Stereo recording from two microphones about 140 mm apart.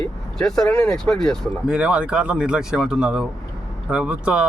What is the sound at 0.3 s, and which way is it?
Speech, 5° left (ahead or behind).